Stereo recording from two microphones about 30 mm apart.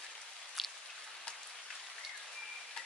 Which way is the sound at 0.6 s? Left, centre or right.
Centre.